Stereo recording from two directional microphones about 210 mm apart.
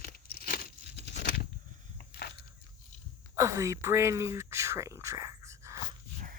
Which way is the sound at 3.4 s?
15° right (ahead or behind).